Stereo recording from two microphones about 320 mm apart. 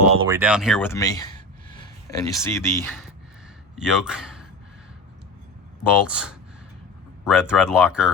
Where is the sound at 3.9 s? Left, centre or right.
Centre.